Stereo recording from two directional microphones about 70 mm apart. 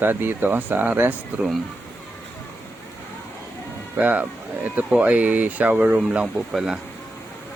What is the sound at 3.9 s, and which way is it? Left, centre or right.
Speech, right.